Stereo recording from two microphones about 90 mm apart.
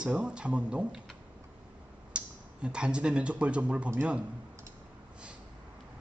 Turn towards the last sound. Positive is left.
turn(degrees=-15)  # may be behind; listen again after turning